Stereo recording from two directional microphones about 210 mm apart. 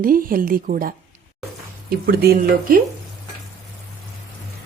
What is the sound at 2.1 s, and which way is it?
Speech, 45° right (ahead or behind).